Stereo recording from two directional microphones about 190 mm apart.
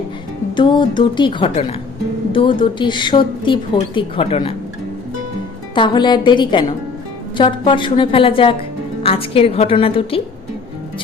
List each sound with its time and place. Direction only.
0.5 s a woman's voice: 25° left (ahead or behind)
5.7 s a woman's voice: 25° left (ahead or behind)